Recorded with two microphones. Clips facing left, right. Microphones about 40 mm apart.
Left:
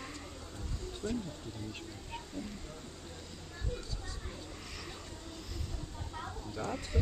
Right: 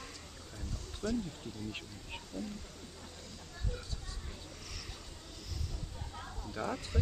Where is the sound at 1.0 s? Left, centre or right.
Right.